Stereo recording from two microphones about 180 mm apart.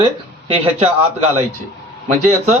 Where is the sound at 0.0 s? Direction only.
30° right (ahead or behind).